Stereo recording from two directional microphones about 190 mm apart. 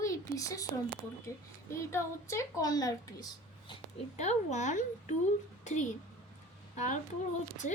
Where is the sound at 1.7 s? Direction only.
15° left (ahead or behind).